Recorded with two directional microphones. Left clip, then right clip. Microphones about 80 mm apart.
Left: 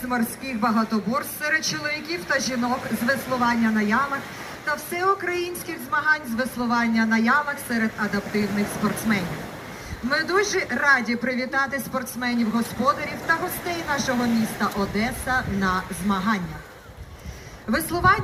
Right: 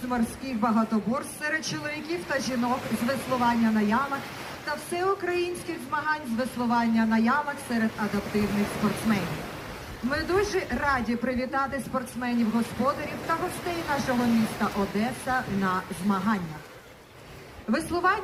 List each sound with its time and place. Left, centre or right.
0.6 s speech: centre
17.7 s a woman's voice: centre